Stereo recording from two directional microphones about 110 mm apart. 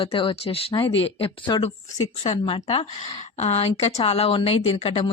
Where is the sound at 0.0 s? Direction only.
55° left (ahead or behind).